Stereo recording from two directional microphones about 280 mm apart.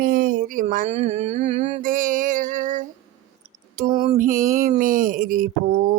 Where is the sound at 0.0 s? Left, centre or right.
Right.